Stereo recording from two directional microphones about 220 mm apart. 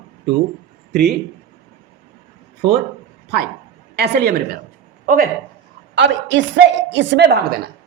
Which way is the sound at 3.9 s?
50° right (ahead or behind).